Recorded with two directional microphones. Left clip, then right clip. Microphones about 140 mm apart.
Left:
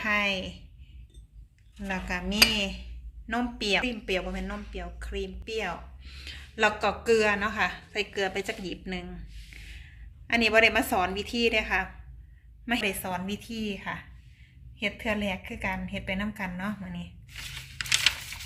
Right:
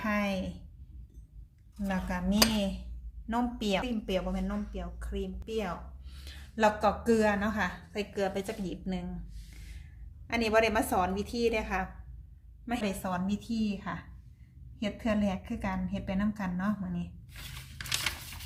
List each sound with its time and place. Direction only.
0.0 s speech: centre (ahead or behind)
1.8 s a woman's voice: centre (ahead or behind)
17.7 s a sound: 35° right (ahead or behind)